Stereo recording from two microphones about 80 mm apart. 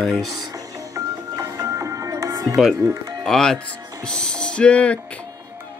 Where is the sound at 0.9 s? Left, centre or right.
Right.